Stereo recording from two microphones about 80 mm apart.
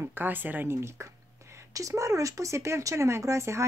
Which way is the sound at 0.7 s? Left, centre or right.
Right.